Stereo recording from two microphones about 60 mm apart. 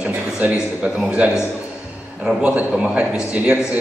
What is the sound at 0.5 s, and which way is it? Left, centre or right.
A man's voice, centre.